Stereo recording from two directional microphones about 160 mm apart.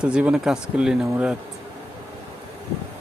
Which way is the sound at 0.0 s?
5° right (ahead or behind).